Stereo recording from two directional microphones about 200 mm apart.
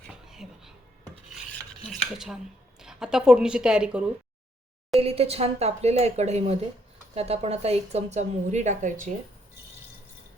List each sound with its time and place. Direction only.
0.1 s a sound: centre (ahead or behind)
1.9 s a woman's voice: centre (ahead or behind)
4.9 s a woman's voice: 30° right (ahead or behind)